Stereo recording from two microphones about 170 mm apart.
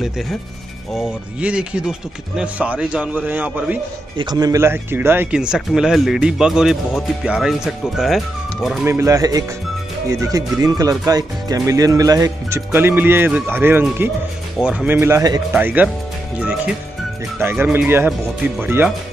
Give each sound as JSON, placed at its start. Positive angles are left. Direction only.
{"t": 0.9, "sound": "speech", "side_deg": -5}
{"t": 4.2, "sound": "speech", "side_deg": -25}
{"t": 8.8, "sound": "speech", "side_deg": -15}
{"t": 15.5, "sound": "speech", "side_deg": -10}